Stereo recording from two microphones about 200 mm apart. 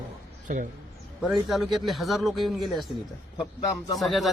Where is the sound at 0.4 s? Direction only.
40° right (ahead or behind).